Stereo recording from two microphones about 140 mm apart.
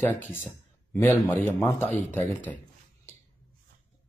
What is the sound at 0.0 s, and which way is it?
A man's voice, 15° left (ahead or behind).